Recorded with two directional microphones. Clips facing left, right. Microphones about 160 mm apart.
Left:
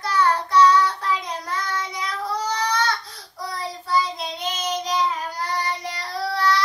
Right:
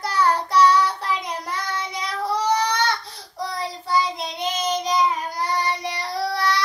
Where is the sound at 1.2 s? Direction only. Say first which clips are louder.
Even; 15° right (ahead or behind).